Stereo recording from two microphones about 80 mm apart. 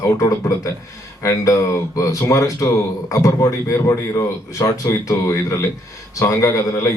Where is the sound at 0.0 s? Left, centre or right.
Left.